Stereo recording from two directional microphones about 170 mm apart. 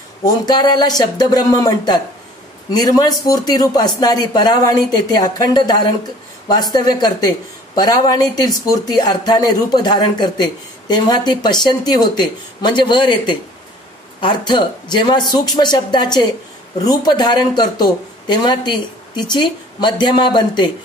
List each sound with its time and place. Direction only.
0.2 s speech: 25° left (ahead or behind)